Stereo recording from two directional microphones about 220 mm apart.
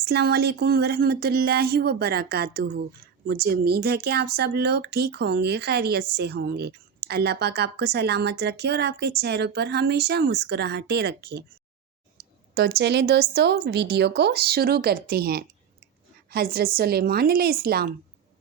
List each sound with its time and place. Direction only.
0.0 s speech: 45° right (ahead or behind)
12.5 s speech: 45° right (ahead or behind)